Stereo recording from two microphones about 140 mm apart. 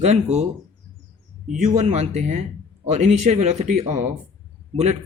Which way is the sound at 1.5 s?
55° right (ahead or behind).